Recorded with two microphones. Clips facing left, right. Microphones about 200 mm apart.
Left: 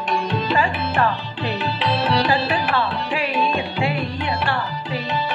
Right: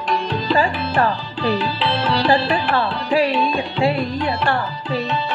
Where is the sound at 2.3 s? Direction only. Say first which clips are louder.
Right 3 dB; 40° right (ahead or behind).